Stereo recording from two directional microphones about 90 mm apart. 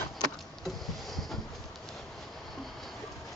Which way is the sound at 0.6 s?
Centre (ahead or behind).